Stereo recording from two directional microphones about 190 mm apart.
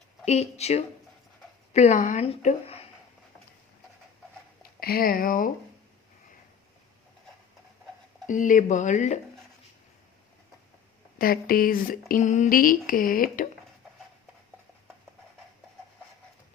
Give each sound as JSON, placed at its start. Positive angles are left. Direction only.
{"t": 0.3, "sound": "a woman's voice", "side_deg": 35}
{"t": 4.8, "sound": "speech", "side_deg": 50}
{"t": 8.3, "sound": "a woman's voice", "side_deg": 45}
{"t": 11.2, "sound": "speech", "side_deg": 50}